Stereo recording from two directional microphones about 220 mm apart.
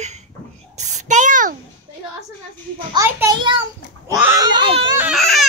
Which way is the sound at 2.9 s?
15° right (ahead or behind).